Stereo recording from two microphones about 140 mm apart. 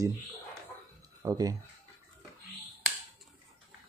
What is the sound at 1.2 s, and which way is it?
Speech, 25° right (ahead or behind).